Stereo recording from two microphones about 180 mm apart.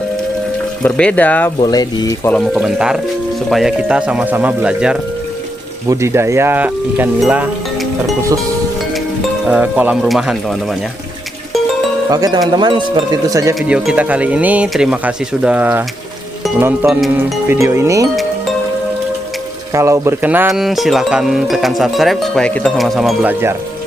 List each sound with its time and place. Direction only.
0.8 s speech: 5° left (ahead or behind)
1.5 s speech: 20° left (ahead or behind)
2.3 s speech: centre (ahead or behind)
9.5 s speech: 5° right (ahead or behind)
12.1 s speech: 20° right (ahead or behind)
13.6 s speech: 5° right (ahead or behind)
19.7 s speech: 15° right (ahead or behind)